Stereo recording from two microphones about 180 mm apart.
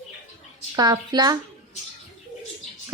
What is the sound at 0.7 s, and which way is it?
Speech, 20° right (ahead or behind).